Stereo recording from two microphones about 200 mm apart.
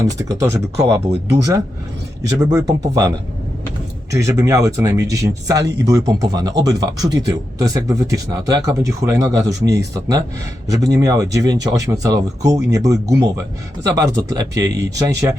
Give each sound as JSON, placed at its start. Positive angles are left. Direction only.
{"t": 0.0, "sound": "speech", "side_deg": -15}
{"t": 2.5, "sound": "speech", "side_deg": -15}
{"t": 4.1, "sound": "speech", "side_deg": -15}